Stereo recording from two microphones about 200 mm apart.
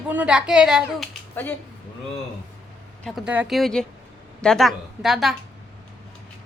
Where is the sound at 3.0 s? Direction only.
5° right (ahead or behind).